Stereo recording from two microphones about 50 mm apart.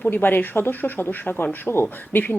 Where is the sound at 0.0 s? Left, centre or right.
Left.